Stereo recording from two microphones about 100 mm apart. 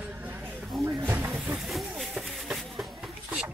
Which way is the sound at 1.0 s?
20° right (ahead or behind).